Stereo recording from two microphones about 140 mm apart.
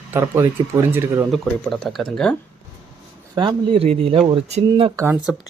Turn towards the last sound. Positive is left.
turn(degrees=-20)  # may be behind; listen again after turning